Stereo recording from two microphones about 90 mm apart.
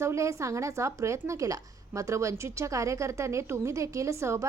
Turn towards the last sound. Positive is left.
turn(degrees=-30)  # may be behind; listen again after turning